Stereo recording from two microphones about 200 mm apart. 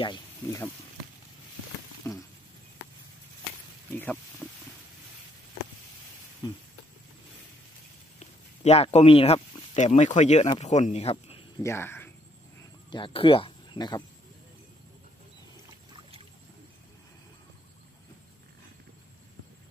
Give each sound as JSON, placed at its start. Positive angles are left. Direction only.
{"t": 0.0, "sound": "speech", "side_deg": 25}
{"t": 2.0, "sound": "speech", "side_deg": 15}
{"t": 3.9, "sound": "speech", "side_deg": 10}
{"t": 8.2, "sound": "speech", "side_deg": 30}
{"t": 11.6, "sound": "speech", "side_deg": 10}
{"t": 12.9, "sound": "speech", "side_deg": 25}